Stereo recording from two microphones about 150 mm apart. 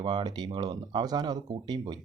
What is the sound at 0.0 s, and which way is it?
Speech, 30° right (ahead or behind).